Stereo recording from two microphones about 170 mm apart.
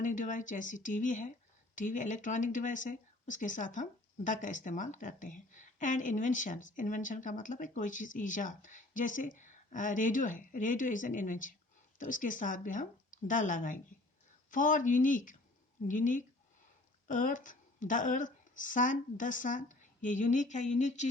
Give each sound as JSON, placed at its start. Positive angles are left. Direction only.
{"t": 0.0, "sound": "speech", "side_deg": 50}